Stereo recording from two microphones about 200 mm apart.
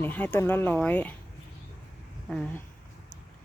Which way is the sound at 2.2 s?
Centre (ahead or behind).